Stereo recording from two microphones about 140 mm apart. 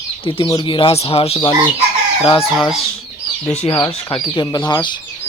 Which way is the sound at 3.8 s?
30° left (ahead or behind).